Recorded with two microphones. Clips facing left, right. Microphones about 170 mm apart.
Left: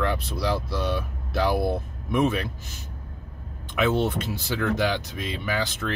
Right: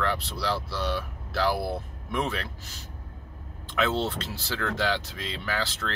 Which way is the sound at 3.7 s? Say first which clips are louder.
Left 4 dB; 15° left (ahead or behind).